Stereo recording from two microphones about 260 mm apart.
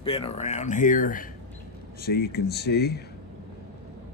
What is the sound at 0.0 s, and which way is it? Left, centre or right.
Speech, left.